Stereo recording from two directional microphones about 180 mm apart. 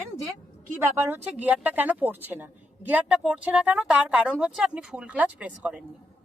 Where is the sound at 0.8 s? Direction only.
10° right (ahead or behind).